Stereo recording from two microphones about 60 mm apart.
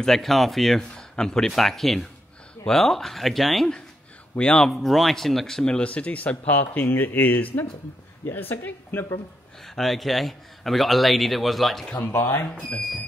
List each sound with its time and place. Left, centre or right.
0.0 s speech: centre
4.4 s speech: centre
5.8 s a woman's voice: left
9.8 s speech: centre
12.0 s a woman's voice: left